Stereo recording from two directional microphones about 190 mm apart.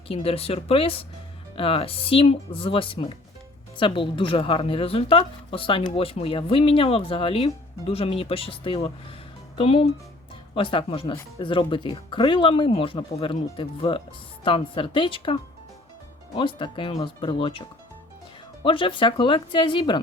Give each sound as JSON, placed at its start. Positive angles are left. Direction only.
{"t": 0.1, "sound": "speech", "side_deg": 30}